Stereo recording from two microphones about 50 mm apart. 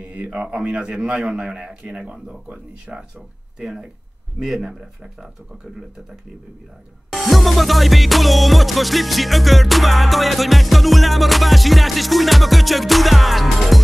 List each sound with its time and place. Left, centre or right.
0.0 s a man's voice: right
2.4 s speech: right
3.5 s speech: centre
7.1 s music: centre